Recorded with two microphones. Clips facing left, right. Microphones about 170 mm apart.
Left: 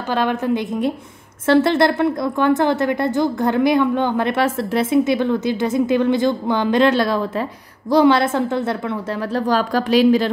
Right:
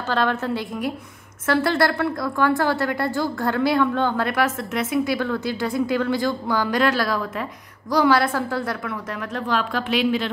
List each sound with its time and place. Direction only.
0.1 s a woman's voice: 15° left (ahead or behind)
9.5 s a woman's voice: 40° left (ahead or behind)